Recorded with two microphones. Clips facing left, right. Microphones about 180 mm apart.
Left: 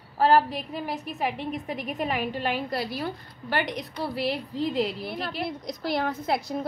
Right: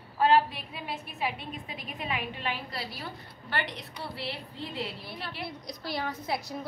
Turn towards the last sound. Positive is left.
turn(degrees=50)  # may be behind; listen again after turning